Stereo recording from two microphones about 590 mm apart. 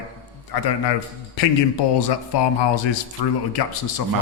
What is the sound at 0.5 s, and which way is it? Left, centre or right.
Speech, left.